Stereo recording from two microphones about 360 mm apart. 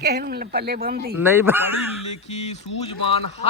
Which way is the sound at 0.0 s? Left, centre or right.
Right.